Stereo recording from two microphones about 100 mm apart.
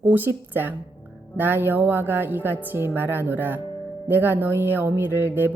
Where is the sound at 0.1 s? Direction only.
20° right (ahead or behind).